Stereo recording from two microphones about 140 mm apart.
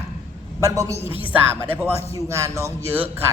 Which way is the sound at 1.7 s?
20° right (ahead or behind).